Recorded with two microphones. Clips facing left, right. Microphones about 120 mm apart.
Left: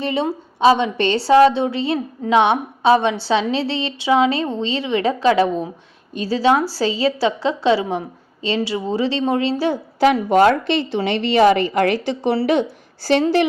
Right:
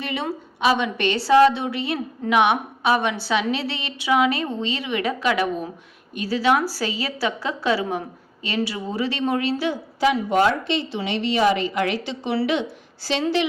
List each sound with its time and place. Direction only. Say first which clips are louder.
0.0 s a woman's voice: left 6 dB; 30° left (ahead or behind)
9.6 s a woman's voice: left 7 dB; 60° left (ahead or behind)